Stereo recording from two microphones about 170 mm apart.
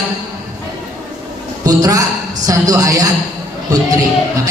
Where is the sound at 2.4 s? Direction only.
20° right (ahead or behind).